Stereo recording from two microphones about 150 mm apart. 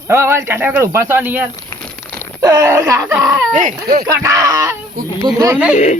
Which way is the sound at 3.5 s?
55° right (ahead or behind).